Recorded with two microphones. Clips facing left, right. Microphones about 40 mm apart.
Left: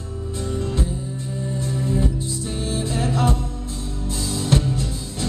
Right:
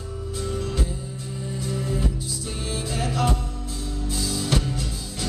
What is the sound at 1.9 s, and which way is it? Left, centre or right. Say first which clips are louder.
Music: left 4 dB; left.